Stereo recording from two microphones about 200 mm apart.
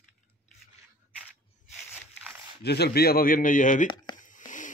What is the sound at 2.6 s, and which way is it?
Speech, 55° left (ahead or behind).